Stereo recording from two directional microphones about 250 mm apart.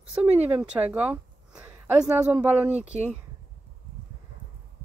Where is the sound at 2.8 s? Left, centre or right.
Right.